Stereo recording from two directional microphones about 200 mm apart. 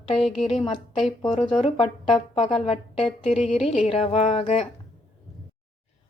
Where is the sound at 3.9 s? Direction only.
30° left (ahead or behind).